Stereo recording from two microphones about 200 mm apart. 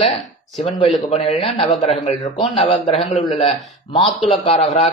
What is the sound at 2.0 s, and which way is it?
A man's voice, 35° left (ahead or behind).